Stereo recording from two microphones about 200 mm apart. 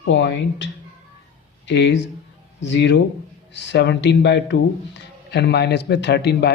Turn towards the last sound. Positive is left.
turn(degrees=55)  # may be behind; listen again after turning